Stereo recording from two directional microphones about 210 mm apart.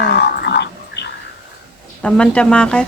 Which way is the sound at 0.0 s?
50° left (ahead or behind).